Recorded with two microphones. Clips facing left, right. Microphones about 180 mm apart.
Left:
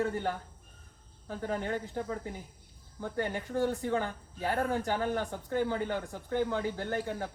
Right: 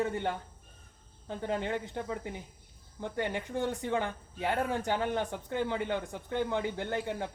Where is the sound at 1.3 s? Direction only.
20° right (ahead or behind).